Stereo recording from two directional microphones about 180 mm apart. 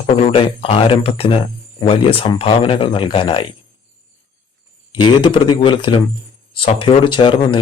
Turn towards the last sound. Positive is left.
turn(degrees=25)  # may be behind; listen again after turning